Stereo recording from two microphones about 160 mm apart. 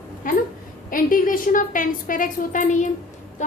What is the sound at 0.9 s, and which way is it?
A woman's voice, 60° left (ahead or behind).